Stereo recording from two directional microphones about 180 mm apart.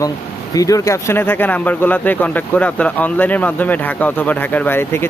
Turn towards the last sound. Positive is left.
turn(degrees=10)  # may be behind; listen again after turning